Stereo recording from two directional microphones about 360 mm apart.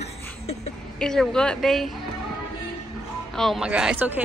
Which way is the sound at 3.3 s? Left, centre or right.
Centre.